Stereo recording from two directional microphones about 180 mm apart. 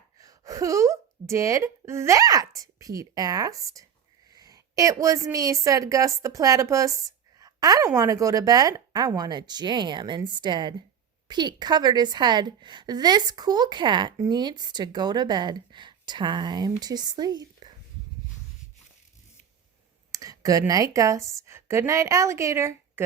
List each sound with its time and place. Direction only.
0.2 s a woman's voice: 20° right (ahead or behind)
7.3 s a sound: 20° right (ahead or behind)
7.9 s speech: 20° right (ahead or behind)
20.1 s a woman's voice: 20° right (ahead or behind)